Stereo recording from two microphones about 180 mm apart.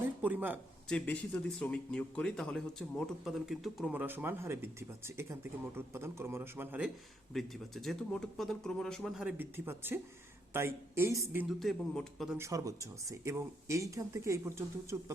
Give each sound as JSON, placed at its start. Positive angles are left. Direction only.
{"t": 0.0, "sound": "speech", "side_deg": -10}
{"t": 0.9, "sound": "a man's voice", "side_deg": 5}
{"t": 11.6, "sound": "a man's voice", "side_deg": 0}
{"t": 12.4, "sound": "speech", "side_deg": -20}